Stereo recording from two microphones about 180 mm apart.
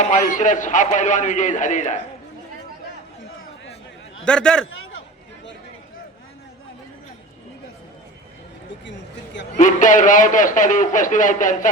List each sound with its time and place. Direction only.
0.0 s a man's voice: 45° left (ahead or behind)
4.3 s speech: 5° left (ahead or behind)
9.6 s a man's voice: 45° left (ahead or behind)